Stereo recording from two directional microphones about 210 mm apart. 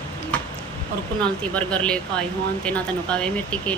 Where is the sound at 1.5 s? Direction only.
5° left (ahead or behind).